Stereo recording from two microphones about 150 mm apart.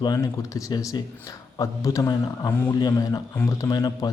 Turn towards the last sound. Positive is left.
turn(degrees=25)  # may be behind; listen again after turning